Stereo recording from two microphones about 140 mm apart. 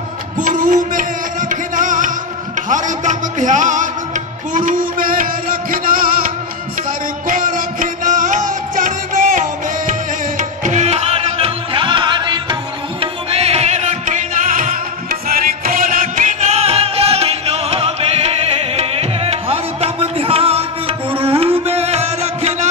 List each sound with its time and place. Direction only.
0.4 s music: 70° right (ahead or behind)
4.6 s music: 75° right (ahead or behind); by 6.3 s 90° right
7.2 s music: 75° right (ahead or behind); by 12.5 s 35° right (ahead or behind)
13.0 s music: 45° right (ahead or behind)